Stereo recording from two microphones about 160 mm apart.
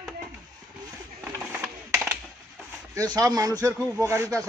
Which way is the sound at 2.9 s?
20° right (ahead or behind).